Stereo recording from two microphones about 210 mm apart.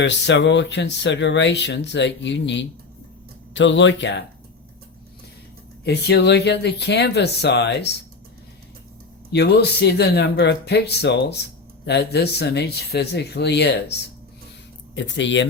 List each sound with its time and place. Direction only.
0.0 s speech: 55° left (ahead or behind)
5.8 s speech: 50° left (ahead or behind)
9.3 s speech: 50° left (ahead or behind)